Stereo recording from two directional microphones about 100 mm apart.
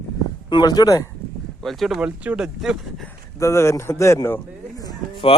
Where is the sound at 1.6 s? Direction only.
Centre (ahead or behind).